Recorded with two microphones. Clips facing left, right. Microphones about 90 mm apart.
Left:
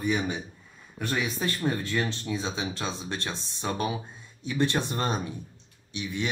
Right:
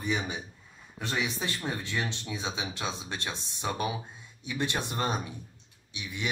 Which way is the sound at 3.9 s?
30° left (ahead or behind).